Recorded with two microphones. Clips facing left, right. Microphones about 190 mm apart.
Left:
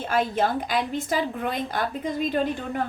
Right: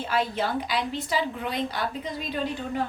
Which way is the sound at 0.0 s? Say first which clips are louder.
Left 3 dB; 50° left (ahead or behind).